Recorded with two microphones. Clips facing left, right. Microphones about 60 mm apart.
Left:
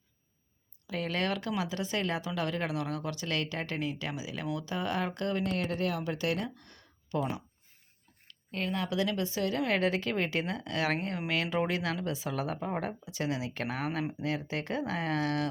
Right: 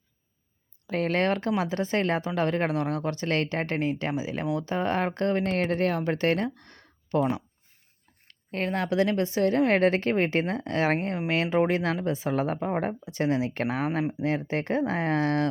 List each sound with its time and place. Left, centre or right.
0.9 s speech: right
14.3 s speech: right